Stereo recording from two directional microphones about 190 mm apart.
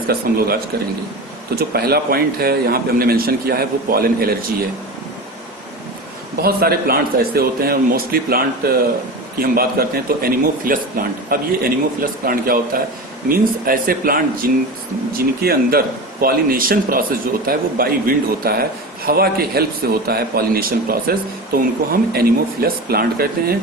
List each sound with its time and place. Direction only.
0.1 s speech: 50° right (ahead or behind)
6.4 s speech: 50° right (ahead or behind)